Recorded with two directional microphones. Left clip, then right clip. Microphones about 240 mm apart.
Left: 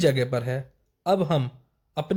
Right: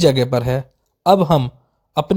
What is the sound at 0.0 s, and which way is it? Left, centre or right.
Speech, right.